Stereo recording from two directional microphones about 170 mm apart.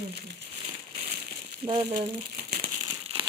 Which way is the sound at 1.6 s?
30° right (ahead or behind).